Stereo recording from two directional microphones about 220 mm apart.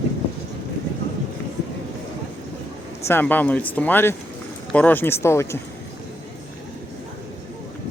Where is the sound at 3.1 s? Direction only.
10° left (ahead or behind).